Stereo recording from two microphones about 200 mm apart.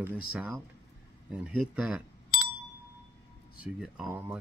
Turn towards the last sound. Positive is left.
turn(degrees=-5)  # may be behind; listen again after turning